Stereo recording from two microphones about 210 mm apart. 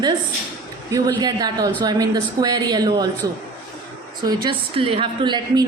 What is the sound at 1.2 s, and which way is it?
A woman's voice, 20° right (ahead or behind).